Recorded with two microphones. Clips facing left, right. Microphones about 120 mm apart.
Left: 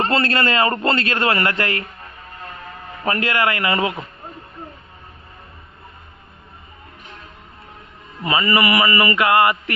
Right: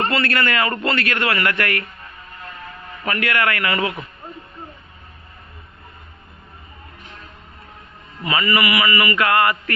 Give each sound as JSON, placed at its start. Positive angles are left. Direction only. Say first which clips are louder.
{"t": 0.1, "sound": "a man's voice", "louder": "left 2 dB", "side_deg": 30}
{"t": 3.0, "sound": "a man's voice", "louder": "left 1 dB", "side_deg": 30}
{"t": 8.2, "sound": "a man's voice", "louder": "left 2 dB", "side_deg": 30}
{"t": 9.1, "sound": "a man's voice", "louder": "left 2 dB", "side_deg": 20}